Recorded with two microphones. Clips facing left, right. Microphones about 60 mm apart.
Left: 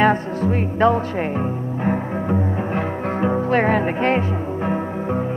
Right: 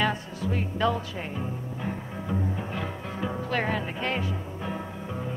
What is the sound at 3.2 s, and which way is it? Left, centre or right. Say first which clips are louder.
Music: left 10 dB; left.